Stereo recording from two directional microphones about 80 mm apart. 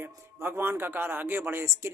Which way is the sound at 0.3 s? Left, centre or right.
Right.